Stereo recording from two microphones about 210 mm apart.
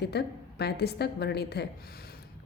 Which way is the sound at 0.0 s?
50° left (ahead or behind).